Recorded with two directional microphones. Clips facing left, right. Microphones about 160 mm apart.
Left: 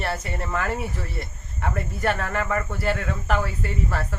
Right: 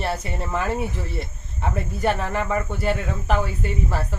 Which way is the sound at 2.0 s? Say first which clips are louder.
Right 2 dB; 20° right (ahead or behind).